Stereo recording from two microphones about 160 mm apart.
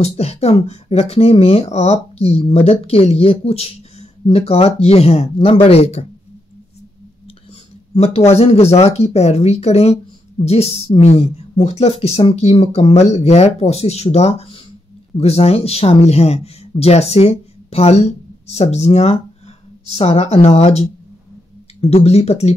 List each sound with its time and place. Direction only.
0.0 s speech: 40° left (ahead or behind)
7.9 s a man's voice: 40° left (ahead or behind)
21.8 s speech: 40° left (ahead or behind)